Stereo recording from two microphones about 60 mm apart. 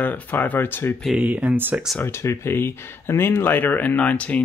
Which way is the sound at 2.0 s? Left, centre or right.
Left.